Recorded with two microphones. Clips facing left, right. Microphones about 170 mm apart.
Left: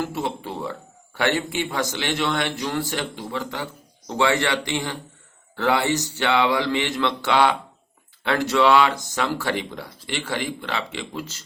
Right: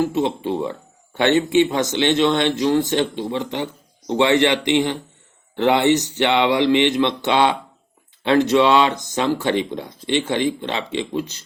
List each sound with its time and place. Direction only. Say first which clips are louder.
0.0 s speech: right 7 dB; 20° right (ahead or behind)